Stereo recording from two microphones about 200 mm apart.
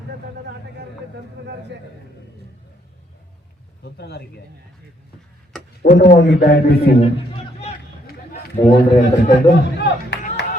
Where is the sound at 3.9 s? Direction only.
55° left (ahead or behind).